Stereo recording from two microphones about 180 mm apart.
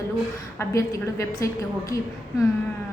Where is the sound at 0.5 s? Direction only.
15° left (ahead or behind).